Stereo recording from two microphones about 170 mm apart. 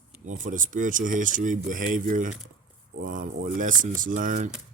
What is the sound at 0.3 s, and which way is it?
Speech, 50° right (ahead or behind).